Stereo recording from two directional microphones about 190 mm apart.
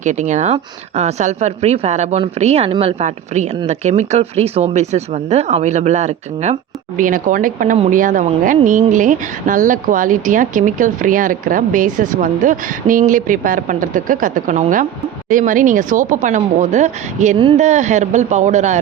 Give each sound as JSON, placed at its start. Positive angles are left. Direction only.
{"t": 0.0, "sound": "speech", "side_deg": -40}